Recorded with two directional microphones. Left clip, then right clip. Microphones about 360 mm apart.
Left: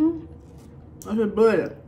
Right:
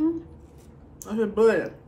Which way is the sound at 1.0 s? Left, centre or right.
Centre.